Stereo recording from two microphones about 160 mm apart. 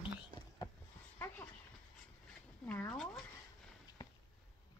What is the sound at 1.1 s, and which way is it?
Dog, 15° left (ahead or behind).